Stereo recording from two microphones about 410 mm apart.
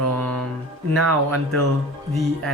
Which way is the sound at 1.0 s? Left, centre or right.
Right.